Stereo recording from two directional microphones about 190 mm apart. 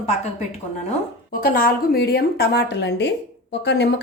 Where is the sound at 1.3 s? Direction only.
50° left (ahead or behind).